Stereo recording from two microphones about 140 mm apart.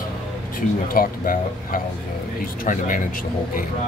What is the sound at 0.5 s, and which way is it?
Speech, 90° left.